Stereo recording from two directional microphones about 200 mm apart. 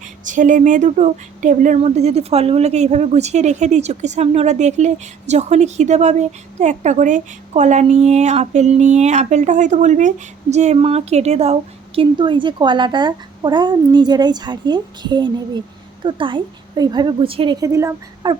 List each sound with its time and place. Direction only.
0.3 s a woman's voice: 40° right (ahead or behind); by 18.3 s 15° right (ahead or behind)